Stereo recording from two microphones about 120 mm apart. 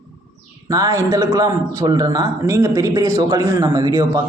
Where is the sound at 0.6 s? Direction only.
30° right (ahead or behind).